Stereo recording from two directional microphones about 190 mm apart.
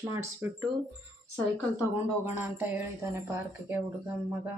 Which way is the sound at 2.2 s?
10° right (ahead or behind).